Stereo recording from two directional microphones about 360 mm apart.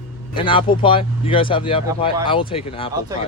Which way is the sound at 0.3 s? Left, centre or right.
Centre.